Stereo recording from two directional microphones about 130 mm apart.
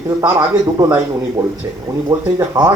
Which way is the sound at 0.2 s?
30° right (ahead or behind).